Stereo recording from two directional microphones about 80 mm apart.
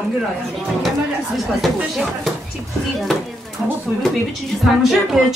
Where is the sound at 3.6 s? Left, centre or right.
Centre.